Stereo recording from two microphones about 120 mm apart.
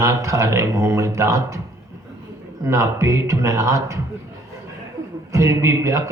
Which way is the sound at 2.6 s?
25° right (ahead or behind).